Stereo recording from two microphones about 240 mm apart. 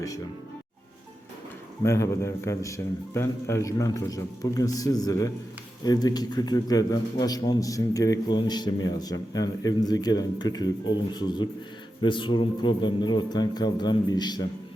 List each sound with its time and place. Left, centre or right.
1.8 s a man's voice: centre